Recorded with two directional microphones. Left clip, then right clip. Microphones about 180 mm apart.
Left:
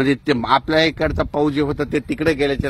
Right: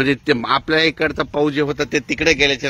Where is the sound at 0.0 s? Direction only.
70° left (ahead or behind).